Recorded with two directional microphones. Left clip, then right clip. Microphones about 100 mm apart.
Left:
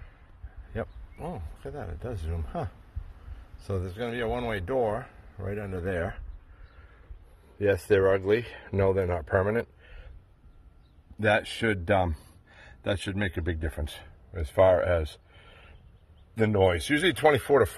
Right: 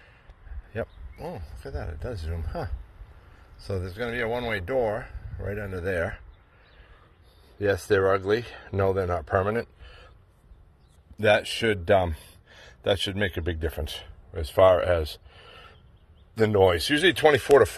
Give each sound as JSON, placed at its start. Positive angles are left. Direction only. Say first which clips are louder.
{"t": 1.2, "sound": "speech", "louder": "right 1 dB", "side_deg": 55}
{"t": 3.7, "sound": "speech", "louder": "right 2 dB", "side_deg": 45}
{"t": 5.4, "sound": "speech", "louder": "right 2 dB", "side_deg": 40}
{"t": 7.5, "sound": "speech", "louder": "even", "side_deg": 35}
{"t": 11.1, "sound": "a man's voice", "louder": "right 3 dB", "side_deg": 25}
{"t": 12.5, "sound": "speech", "louder": "right 6 dB", "side_deg": 5}
{"t": 16.3, "sound": "speech", "louder": "right 4 dB", "side_deg": 10}
{"t": 17.4, "sound": "speech", "louder": "right 5 dB", "side_deg": 0}